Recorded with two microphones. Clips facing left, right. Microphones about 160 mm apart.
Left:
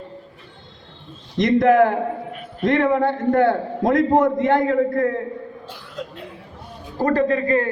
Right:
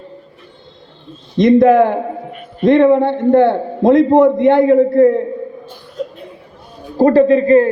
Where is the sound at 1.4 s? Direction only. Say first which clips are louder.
Right 6 dB; 30° right (ahead or behind).